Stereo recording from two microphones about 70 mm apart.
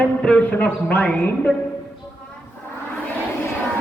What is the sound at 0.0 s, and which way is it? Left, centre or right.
Music, left.